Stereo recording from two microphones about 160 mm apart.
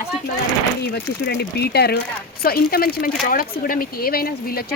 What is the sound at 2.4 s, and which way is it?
Speech, 70° left (ahead or behind).